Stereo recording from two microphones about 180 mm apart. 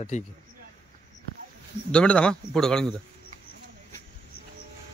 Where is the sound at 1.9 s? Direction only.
5° left (ahead or behind).